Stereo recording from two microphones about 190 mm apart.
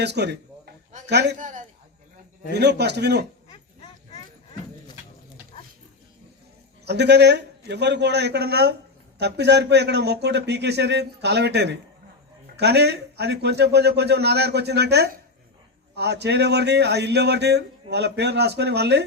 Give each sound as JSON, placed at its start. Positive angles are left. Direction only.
{"t": 0.0, "sound": "speech", "side_deg": -60}
{"t": 1.4, "sound": "a man's voice", "side_deg": -40}
{"t": 2.5, "sound": "speech", "side_deg": -60}
{"t": 6.8, "sound": "speech", "side_deg": -60}